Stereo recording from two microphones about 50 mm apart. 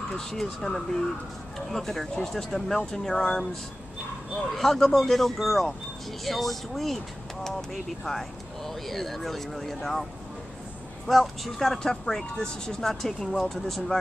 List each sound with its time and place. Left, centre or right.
0.2 s speech: centre
11.1 s speech: centre